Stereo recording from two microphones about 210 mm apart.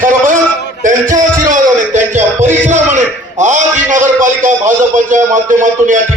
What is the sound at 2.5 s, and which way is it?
Music, 35° right (ahead or behind).